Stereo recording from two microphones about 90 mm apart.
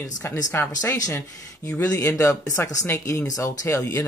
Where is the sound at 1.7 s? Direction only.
15° left (ahead or behind).